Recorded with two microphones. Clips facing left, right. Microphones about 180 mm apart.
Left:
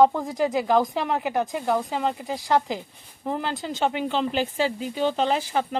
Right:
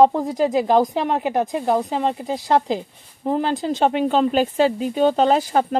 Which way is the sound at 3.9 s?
45° right (ahead or behind).